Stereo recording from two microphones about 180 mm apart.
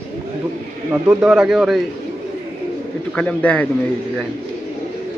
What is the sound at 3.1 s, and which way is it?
Speech, 5° left (ahead or behind).